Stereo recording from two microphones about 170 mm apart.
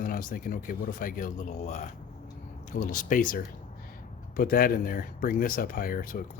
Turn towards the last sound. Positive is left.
turn(degrees=55)  # may be behind; listen again after turning